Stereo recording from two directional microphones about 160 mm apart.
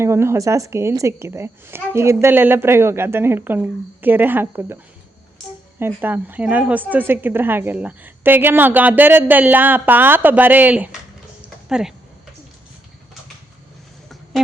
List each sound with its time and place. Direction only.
0.0 s a woman's voice: 15° right (ahead or behind)
5.8 s a woman's voice: 10° right (ahead or behind)
11.4 s a sound: 5° right (ahead or behind)